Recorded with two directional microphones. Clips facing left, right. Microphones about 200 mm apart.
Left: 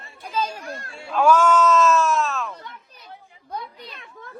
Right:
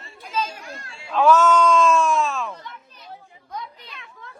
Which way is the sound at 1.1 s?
10° left (ahead or behind).